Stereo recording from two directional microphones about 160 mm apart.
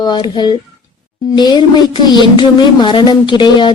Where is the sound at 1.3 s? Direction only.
25° left (ahead or behind).